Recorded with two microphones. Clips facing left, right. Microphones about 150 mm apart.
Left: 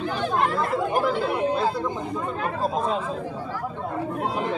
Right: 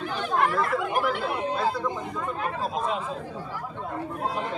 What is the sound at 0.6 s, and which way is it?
Speech, 25° left (ahead or behind).